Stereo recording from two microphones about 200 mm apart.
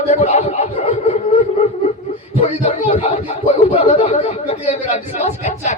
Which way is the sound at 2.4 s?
30° left (ahead or behind).